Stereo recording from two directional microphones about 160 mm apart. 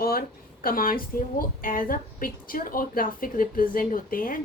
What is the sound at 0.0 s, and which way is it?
A woman's voice, 65° left (ahead or behind).